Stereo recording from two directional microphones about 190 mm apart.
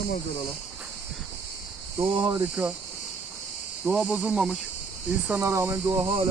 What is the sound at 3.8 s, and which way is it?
Speech, 5° right (ahead or behind).